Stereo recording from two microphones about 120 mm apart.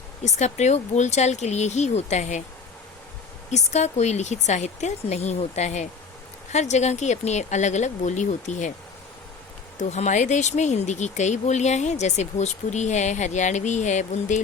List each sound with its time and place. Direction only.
0.2 s speech: 70° left (ahead or behind)
3.5 s speech: 70° left (ahead or behind); by 8.7 s 85° left
9.8 s speech: 70° left (ahead or behind)